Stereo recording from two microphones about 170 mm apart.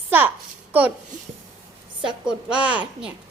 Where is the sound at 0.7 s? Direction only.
10° right (ahead or behind).